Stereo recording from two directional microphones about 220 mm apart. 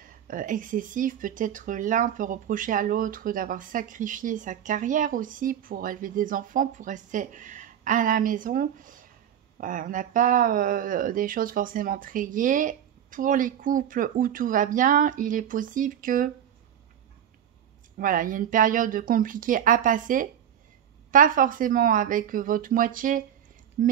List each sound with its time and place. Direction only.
0.0 s speech: 40° right (ahead or behind)
17.9 s speech: 40° right (ahead or behind)